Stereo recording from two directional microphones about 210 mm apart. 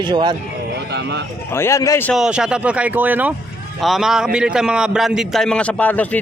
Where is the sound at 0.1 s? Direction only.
20° right (ahead or behind).